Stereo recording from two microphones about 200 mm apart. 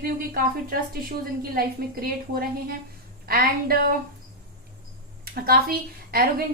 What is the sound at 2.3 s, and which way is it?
A woman's voice, 50° right (ahead or behind).